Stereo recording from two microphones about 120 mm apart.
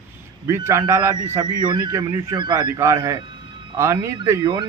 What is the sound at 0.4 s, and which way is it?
Speech, 20° right (ahead or behind).